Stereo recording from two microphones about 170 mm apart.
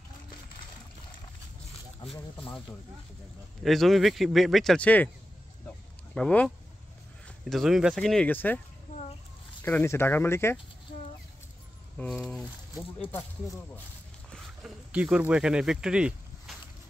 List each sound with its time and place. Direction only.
3.6 s speech: centre (ahead or behind)
6.1 s speech: 5° left (ahead or behind)
9.6 s speech: 10° left (ahead or behind)
12.0 s speech: 5° left (ahead or behind)
13.0 s speech: 15° left (ahead or behind)
14.3 s speech: 5° right (ahead or behind)